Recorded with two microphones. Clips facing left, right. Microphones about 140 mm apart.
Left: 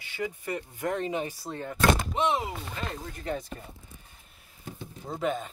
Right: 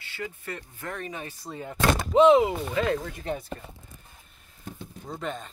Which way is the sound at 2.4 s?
90° right.